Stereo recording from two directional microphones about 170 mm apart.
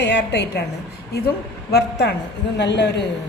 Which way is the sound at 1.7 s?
75° left (ahead or behind).